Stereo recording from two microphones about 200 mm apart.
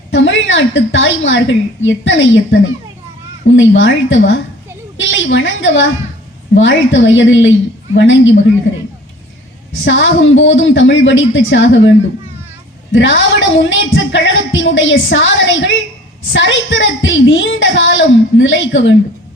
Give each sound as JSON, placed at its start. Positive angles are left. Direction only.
{"t": 0.1, "sound": "speech", "side_deg": 65}
{"t": 9.8, "sound": "speech", "side_deg": 70}
{"t": 12.9, "sound": "speech", "side_deg": 70}